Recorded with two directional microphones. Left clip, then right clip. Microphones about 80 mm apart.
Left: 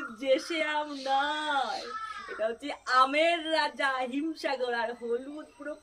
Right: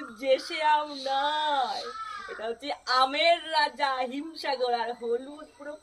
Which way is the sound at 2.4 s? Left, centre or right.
Centre.